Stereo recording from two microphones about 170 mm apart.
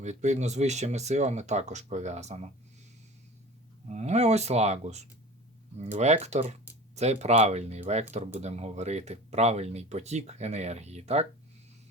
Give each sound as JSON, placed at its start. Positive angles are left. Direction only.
{"t": 0.0, "sound": "speech", "side_deg": -45}
{"t": 3.8, "sound": "speech", "side_deg": -40}